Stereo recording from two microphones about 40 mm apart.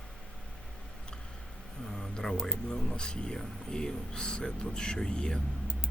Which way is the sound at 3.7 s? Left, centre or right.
Centre.